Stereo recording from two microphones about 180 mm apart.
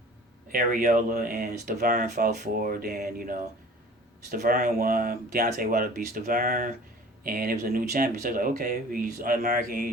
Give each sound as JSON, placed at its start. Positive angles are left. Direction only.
{"t": 0.5, "sound": "speech", "side_deg": -50}